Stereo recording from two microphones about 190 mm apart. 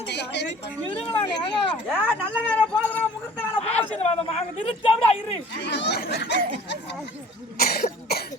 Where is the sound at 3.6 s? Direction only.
30° left (ahead or behind).